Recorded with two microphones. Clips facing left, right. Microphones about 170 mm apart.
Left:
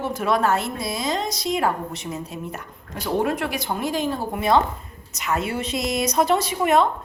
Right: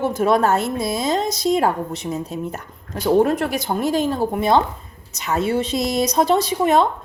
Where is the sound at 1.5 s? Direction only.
35° right (ahead or behind).